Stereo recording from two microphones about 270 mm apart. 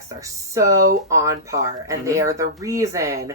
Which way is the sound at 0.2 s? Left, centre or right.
Centre.